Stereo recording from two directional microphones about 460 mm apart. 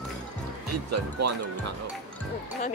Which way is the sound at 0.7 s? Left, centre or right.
Right.